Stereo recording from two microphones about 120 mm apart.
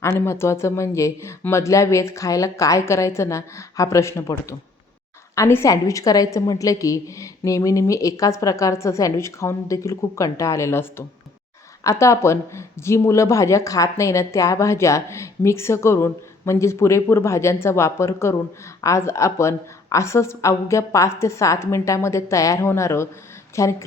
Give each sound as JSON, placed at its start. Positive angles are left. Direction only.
{"t": 0.0, "sound": "speech", "side_deg": 20}